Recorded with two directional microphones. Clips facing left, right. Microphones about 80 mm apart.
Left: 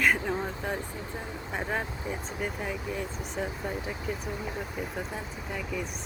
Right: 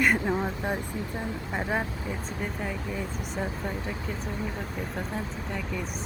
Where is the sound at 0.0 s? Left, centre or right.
Centre.